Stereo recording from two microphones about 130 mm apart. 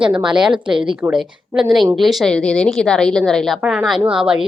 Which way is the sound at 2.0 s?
Centre (ahead or behind).